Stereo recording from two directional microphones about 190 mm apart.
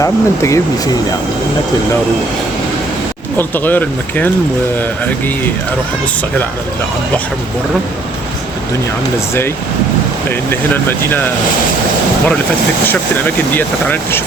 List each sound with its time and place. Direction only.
0.0 s speech: 15° left (ahead or behind)
3.3 s speech: 10° left (ahead or behind)
10.2 s speech: 10° left (ahead or behind)
12.9 s speech: 10° left (ahead or behind)